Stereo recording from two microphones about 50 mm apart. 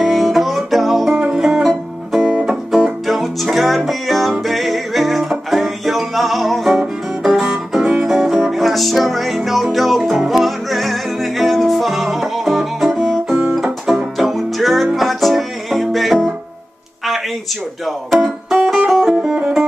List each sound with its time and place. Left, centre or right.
0.0 s music: centre
1.7 s music: centre
7.8 s music: centre
8.1 s music: centre
17.8 s music: centre